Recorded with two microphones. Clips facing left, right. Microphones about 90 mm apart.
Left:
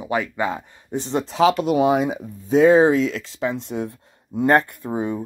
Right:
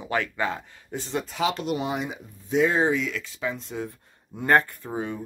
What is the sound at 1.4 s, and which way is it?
Speech, 90° left.